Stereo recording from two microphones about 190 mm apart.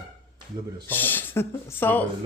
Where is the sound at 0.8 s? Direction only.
10° left (ahead or behind).